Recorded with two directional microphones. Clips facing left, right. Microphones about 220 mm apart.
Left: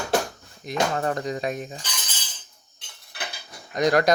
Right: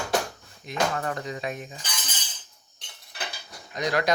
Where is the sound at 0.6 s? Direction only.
35° left (ahead or behind).